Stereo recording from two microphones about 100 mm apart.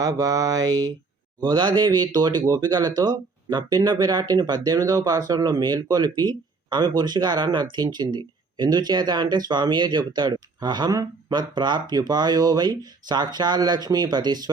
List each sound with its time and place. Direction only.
0.0 s mantra: 35° right (ahead or behind)
1.5 s speech: 50° right (ahead or behind)